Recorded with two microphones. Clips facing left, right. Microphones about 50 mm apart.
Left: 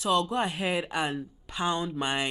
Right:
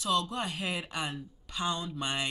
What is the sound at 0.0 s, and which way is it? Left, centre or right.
Speech, left.